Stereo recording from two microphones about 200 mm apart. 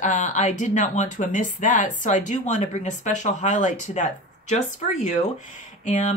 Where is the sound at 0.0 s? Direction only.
40° left (ahead or behind).